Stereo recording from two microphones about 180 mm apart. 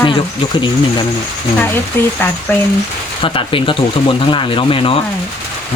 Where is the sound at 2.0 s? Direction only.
10° left (ahead or behind).